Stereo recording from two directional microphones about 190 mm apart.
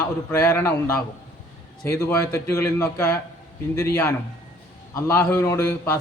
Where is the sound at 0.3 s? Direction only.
10° left (ahead or behind).